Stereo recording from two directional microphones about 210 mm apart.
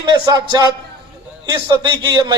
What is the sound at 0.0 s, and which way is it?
Speech, 20° right (ahead or behind).